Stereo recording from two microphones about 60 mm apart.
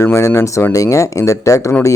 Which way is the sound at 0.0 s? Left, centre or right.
Left.